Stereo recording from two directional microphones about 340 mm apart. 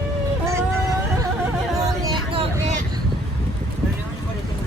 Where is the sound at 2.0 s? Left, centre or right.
Centre.